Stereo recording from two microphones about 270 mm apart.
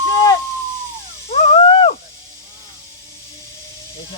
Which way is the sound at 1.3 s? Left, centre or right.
Left.